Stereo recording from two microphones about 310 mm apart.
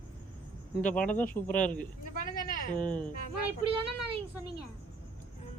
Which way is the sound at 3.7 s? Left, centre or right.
Centre.